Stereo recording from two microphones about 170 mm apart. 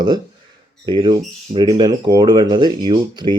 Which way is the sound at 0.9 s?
25° right (ahead or behind).